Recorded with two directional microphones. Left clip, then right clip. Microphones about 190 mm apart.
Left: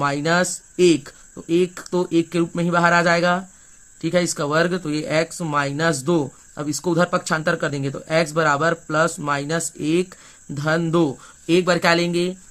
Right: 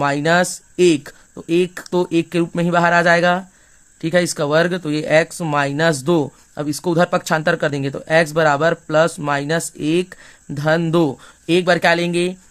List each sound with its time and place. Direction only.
0.0 s speech: 25° right (ahead or behind)